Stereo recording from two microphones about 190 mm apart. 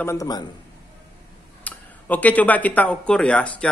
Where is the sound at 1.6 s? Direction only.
10° left (ahead or behind).